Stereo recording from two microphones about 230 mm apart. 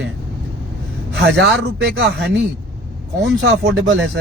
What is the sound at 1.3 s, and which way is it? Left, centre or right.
Speech, right.